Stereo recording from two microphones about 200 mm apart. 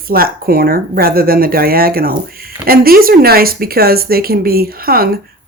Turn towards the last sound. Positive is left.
turn(degrees=-50)  # may be behind; listen again after turning